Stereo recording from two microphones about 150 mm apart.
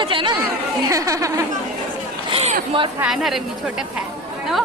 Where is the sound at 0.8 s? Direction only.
20° right (ahead or behind).